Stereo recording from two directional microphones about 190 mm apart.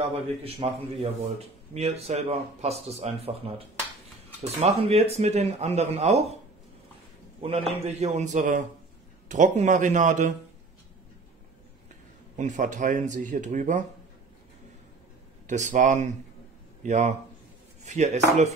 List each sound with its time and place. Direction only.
0.0 s speech: 30° right (ahead or behind)
7.4 s speech: 30° right (ahead or behind)
12.4 s speech: 40° right (ahead or behind)
15.4 s speech: 40° right (ahead or behind)